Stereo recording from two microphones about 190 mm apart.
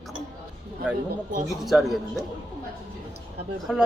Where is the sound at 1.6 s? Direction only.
Centre (ahead or behind).